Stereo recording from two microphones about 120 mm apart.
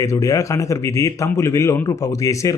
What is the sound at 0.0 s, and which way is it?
A man's voice, 25° left (ahead or behind).